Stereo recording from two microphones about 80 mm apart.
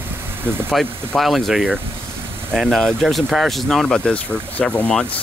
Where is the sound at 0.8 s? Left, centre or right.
Centre.